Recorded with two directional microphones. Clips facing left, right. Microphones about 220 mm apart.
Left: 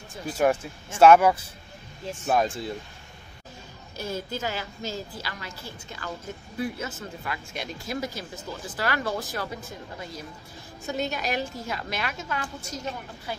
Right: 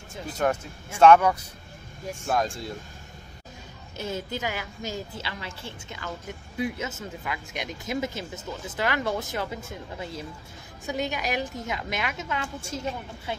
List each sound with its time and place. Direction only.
0.9 s speech: 5° left (ahead or behind)
4.0 s speech: 20° right (ahead or behind)
10.9 s speech: 15° right (ahead or behind)